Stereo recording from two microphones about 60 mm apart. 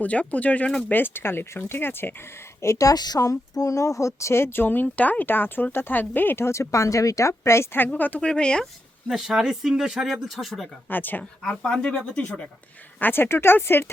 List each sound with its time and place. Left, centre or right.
0.0 s speech: left
0.9 s speech: left
2.6 s a woman's voice: left
2.8 s speech: left
7.9 s speech: left
8.2 s speech: centre
9.0 s speech: centre
10.8 s speech: left
11.2 s speech: centre
11.9 s speech: left
13.0 s speech: left